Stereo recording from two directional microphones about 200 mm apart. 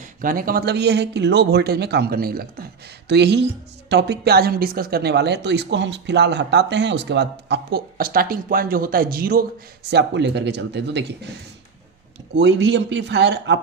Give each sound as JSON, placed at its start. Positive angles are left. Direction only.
{"t": 0.0, "sound": "a woman's voice", "side_deg": -45}
{"t": 9.9, "sound": "a woman's voice", "side_deg": -60}